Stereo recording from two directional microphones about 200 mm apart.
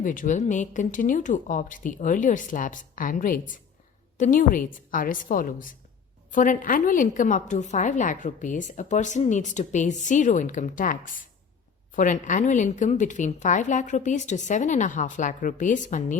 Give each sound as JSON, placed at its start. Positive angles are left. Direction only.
{"t": 0.0, "sound": "a woman's voice", "side_deg": 40}